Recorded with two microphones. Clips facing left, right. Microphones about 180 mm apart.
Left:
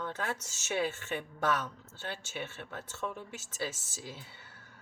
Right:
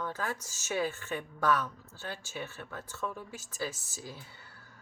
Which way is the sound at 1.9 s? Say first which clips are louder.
Left 2 dB; 25° left (ahead or behind).